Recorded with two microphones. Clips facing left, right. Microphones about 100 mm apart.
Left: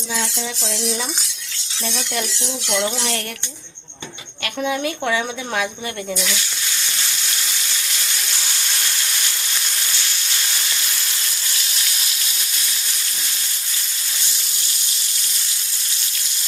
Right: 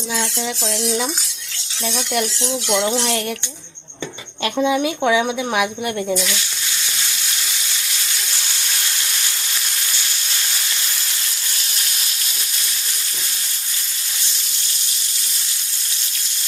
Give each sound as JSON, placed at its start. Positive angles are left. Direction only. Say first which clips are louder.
{"t": 2.6, "sound": "speech", "louder": "right 3 dB", "side_deg": -20}
{"t": 4.6, "sound": "speech", "louder": "right 4 dB", "side_deg": -15}
{"t": 7.4, "sound": "sizzle", "louder": "even", "side_deg": 0}